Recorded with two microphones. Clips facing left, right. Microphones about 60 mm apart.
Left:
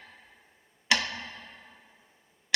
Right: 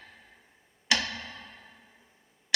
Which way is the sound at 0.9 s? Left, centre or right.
Left.